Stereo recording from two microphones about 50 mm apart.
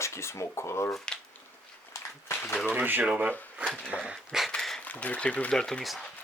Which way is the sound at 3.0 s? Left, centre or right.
Right.